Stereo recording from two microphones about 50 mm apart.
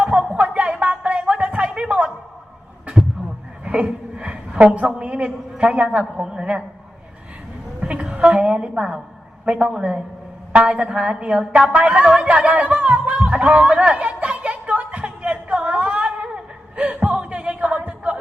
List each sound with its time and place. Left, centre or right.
0.0 s music: right
0.3 s a sound: right
3.6 s music: right
4.1 s a woman's voice: right
7.9 s a woman's voice: right
10.5 s a woman's voice: right
11.7 s music: right
16.3 s a sound: right